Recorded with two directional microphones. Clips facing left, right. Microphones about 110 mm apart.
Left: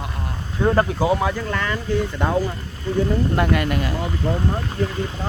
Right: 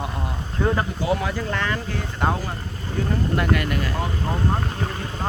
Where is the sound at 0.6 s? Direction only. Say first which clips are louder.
Left 3 dB; 15° left (ahead or behind).